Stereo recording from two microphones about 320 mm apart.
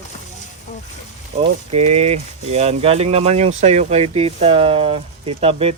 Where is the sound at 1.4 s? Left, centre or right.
Centre.